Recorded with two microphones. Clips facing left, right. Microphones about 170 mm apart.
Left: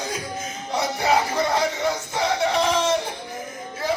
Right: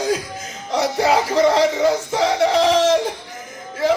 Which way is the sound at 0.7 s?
80° right.